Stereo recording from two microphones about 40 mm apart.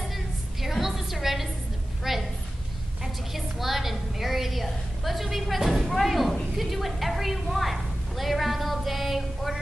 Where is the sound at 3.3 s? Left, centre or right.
Centre.